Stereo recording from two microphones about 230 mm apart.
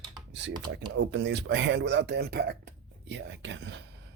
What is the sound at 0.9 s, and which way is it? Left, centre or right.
Speech, right.